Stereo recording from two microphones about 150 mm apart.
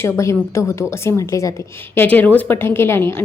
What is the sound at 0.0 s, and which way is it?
A woman's voice, 20° left (ahead or behind).